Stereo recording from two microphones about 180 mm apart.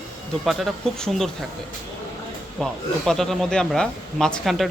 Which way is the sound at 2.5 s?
Centre (ahead or behind).